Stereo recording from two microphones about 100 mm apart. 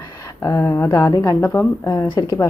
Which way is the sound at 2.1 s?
45° left (ahead or behind).